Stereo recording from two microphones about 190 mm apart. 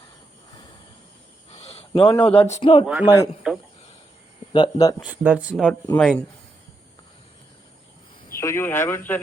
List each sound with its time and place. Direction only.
1.5 s a sound: 30° left (ahead or behind)
2.4 s speech: 30° left (ahead or behind)
2.8 s speech: 10° right (ahead or behind)
4.5 s speech: 20° left (ahead or behind)
4.9 s speech: 10° right (ahead or behind)
6.0 s speech: 5° left (ahead or behind)
8.4 s speech: 15° left (ahead or behind)